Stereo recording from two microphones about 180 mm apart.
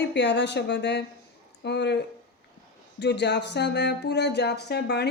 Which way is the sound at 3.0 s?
70° left (ahead or behind).